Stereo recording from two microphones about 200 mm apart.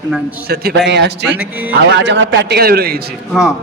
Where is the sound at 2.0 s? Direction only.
60° right (ahead or behind).